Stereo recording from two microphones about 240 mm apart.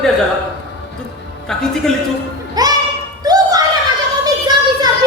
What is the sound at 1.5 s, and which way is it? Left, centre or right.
Speech, centre.